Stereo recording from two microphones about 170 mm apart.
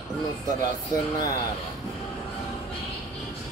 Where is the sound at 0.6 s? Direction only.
20° left (ahead or behind).